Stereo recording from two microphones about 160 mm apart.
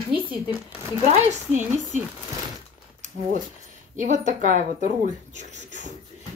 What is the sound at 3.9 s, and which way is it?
Speech, 50° right (ahead or behind).